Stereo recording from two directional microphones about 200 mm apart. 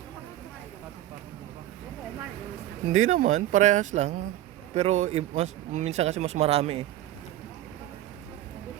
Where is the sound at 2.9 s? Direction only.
40° right (ahead or behind).